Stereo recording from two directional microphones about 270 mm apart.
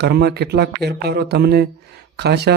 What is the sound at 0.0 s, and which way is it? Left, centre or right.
A man's voice, right.